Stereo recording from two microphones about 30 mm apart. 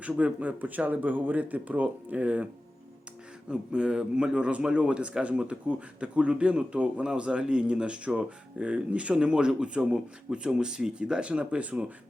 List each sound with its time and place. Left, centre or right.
0.2 s speech: right
0.6 s speech: right
3.5 s speech: right
7.3 s speech: right
8.9 s speech: right
9.1 s speech: right